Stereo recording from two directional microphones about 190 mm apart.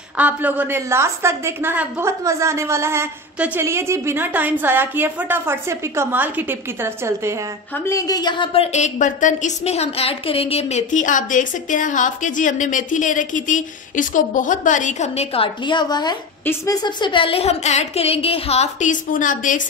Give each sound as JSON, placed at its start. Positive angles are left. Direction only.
{"t": 0.2, "sound": "a woman's voice", "side_deg": -10}
{"t": 7.7, "sound": "a woman's voice", "side_deg": 15}